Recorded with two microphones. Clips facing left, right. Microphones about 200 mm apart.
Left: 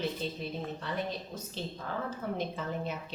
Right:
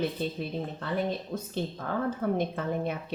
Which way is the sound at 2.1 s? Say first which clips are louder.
Right 8 dB; 55° right (ahead or behind).